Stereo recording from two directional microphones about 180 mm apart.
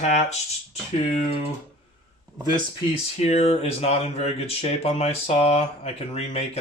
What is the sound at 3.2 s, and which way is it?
Speech, 35° left (ahead or behind).